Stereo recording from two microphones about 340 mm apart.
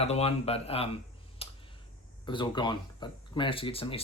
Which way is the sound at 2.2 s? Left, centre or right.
Centre.